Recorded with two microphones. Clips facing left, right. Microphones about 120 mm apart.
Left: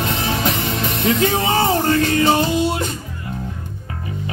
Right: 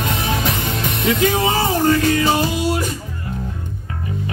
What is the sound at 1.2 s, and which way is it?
Music, 25° left (ahead or behind).